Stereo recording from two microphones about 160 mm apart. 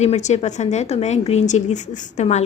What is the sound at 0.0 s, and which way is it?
A woman's voice, 45° left (ahead or behind).